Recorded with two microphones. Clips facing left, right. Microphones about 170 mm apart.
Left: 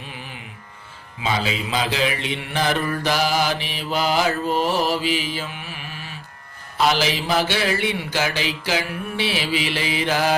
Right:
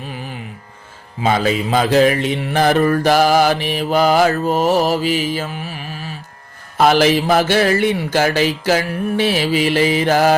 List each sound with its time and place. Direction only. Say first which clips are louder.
1.2 s mantra: right 8 dB; 50° right (ahead or behind)
6.7 s mantra: right 8 dB; 50° right (ahead or behind)